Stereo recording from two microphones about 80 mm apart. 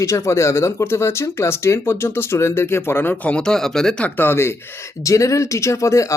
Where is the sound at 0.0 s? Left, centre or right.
Left; by 4.0 s centre.